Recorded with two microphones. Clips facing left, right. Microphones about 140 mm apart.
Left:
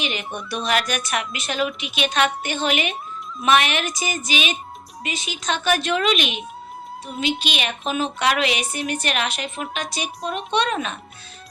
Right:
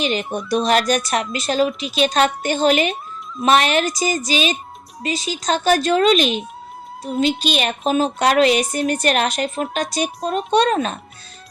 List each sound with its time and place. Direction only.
0.0 s speech: 40° right (ahead or behind)